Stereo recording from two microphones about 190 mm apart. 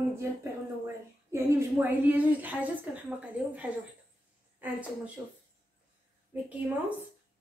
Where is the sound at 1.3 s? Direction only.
10° right (ahead or behind).